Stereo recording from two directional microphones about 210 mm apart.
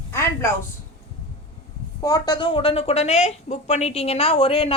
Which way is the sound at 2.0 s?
20° left (ahead or behind).